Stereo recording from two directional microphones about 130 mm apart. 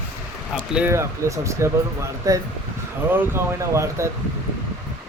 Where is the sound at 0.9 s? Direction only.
20° right (ahead or behind).